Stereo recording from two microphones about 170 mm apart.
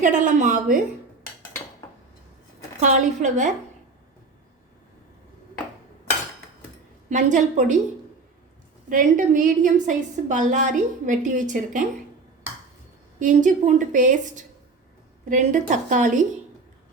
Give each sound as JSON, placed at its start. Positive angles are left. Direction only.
{"t": 0.0, "sound": "a woman's voice", "side_deg": -50}
{"t": 2.8, "sound": "a woman's voice", "side_deg": -45}
{"t": 7.1, "sound": "a woman's voice", "side_deg": -45}
{"t": 8.9, "sound": "a woman's voice", "side_deg": -50}
{"t": 13.1, "sound": "a woman's voice", "side_deg": -50}